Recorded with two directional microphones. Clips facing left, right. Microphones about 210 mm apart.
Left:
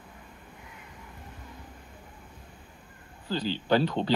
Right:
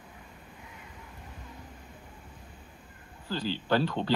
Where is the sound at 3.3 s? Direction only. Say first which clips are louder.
Left 3 dB; 20° left (ahead or behind).